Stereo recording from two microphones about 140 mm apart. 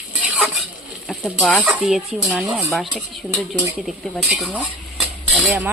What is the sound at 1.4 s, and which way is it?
Speech, 5° left (ahead or behind).